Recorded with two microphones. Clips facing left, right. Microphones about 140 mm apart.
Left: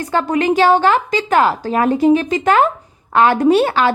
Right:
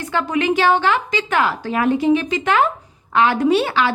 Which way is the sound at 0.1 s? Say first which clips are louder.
Left 3 dB; 40° left (ahead or behind).